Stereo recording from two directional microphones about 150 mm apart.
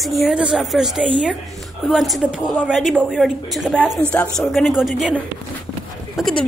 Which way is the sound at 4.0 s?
10° left (ahead or behind).